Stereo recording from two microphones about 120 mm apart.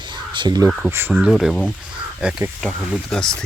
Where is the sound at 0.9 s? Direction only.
20° right (ahead or behind).